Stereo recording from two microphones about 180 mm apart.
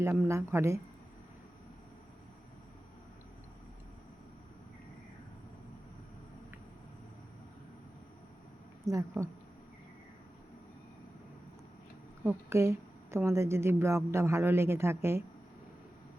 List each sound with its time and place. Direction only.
0.0 s a woman's voice: 15° right (ahead or behind)
8.8 s a woman's voice: 15° right (ahead or behind)
12.2 s a woman's voice: 15° right (ahead or behind)